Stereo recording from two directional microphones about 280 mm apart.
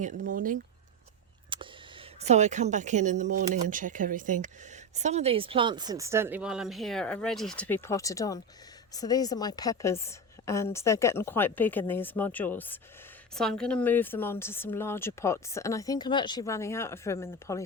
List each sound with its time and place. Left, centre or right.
0.0 s speech: right
1.5 s a sound: centre
2.2 s a woman's voice: right; by 17.6 s centre